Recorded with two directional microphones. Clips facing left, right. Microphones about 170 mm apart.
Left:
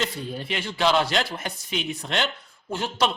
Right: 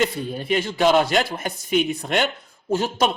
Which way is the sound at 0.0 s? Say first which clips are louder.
Right 6 dB; 55° right (ahead or behind).